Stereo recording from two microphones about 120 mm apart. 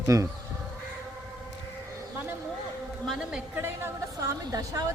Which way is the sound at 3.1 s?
5° right (ahead or behind).